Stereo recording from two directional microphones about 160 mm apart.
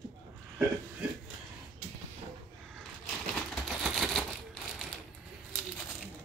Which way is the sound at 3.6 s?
Centre (ahead or behind).